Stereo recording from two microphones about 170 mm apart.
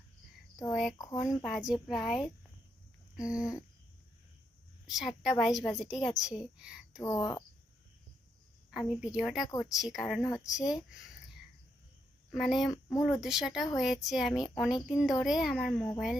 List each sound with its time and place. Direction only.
0.7 s a woman's voice: centre (ahead or behind)
0.9 s cricket: 20° left (ahead or behind)
1.5 s a woman's voice: centre (ahead or behind)
3.3 s cricket: 20° left (ahead or behind)
4.9 s a woman's voice: 5° right (ahead or behind)
7.0 s cricket: 20° left (ahead or behind)
8.9 s a woman's voice: 5° right (ahead or behind)
10.2 s cricket: 20° left (ahead or behind)
10.4 s a woman's voice: 5° right (ahead or behind)
12.3 s a woman's voice: centre (ahead or behind)
12.7 s cricket: 20° left (ahead or behind)
13.1 s a woman's voice: 5° right (ahead or behind)